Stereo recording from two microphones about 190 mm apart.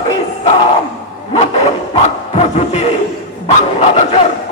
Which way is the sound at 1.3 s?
30° left (ahead or behind).